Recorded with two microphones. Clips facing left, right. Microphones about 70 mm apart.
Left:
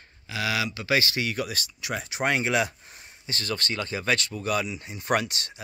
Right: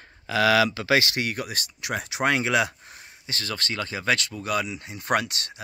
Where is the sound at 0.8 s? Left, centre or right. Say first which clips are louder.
Right 3 dB; right.